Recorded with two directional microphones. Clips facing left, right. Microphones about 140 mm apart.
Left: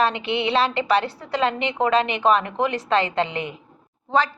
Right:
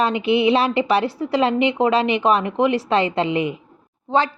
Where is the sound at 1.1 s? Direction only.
20° right (ahead or behind).